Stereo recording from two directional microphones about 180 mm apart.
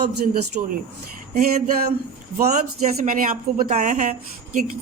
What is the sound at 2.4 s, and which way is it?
Speech, 45° right (ahead or behind).